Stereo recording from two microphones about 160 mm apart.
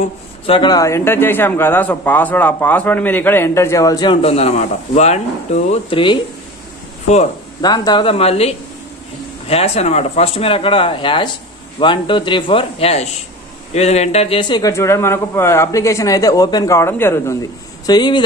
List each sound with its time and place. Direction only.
0.5 s a man's voice: 25° left (ahead or behind)
7.6 s speech: 25° left (ahead or behind)